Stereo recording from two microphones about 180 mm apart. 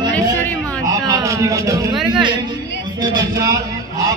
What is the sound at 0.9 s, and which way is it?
A man's voice, 20° right (ahead or behind).